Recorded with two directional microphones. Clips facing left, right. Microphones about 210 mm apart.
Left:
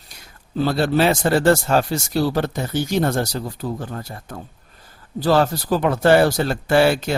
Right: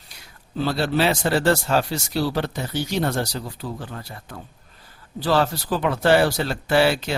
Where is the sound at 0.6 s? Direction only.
45° left (ahead or behind).